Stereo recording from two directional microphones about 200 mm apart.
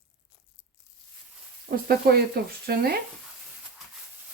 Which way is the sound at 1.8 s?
50° right (ahead or behind).